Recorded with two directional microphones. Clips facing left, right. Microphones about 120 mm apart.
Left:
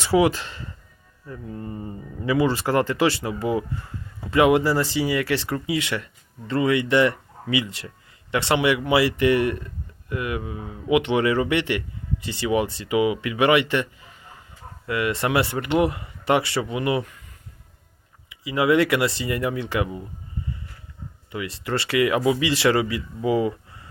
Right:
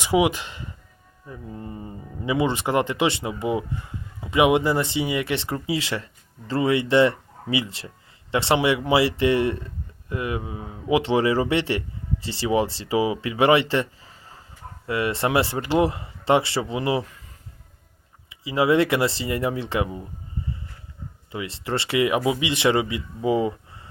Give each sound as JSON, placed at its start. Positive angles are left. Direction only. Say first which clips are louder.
{"t": 0.0, "sound": "speech", "louder": "left 1 dB", "side_deg": -15}
{"t": 18.3, "sound": "speech", "louder": "even", "side_deg": -25}
{"t": 21.3, "sound": "speech", "louder": "left 1 dB", "side_deg": -25}